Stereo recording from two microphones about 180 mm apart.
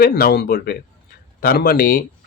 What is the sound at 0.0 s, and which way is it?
Speech, 55° left (ahead or behind).